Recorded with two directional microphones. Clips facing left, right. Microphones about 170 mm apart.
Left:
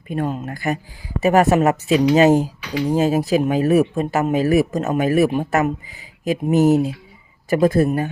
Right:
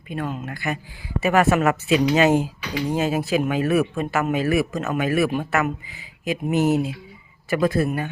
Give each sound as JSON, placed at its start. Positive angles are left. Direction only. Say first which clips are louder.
{"t": 0.1, "sound": "speech", "louder": "left 5 dB", "side_deg": 40}